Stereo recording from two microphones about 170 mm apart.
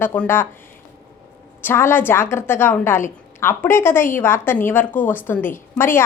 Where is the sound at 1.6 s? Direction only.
15° left (ahead or behind).